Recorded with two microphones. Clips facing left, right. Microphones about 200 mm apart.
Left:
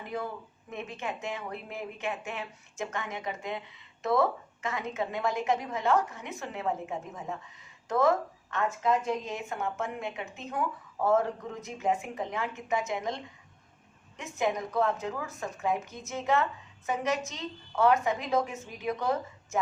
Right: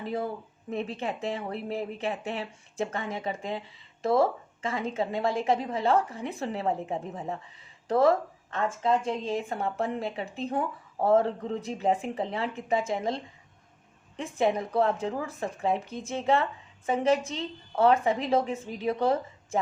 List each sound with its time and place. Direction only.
0.0 s a woman's voice: 30° right (ahead or behind)